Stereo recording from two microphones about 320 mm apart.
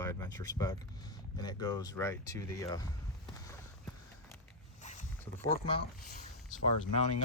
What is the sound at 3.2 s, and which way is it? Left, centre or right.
Clip-clop, centre.